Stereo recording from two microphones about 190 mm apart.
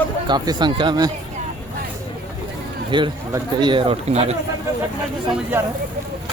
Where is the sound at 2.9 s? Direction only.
25° right (ahead or behind).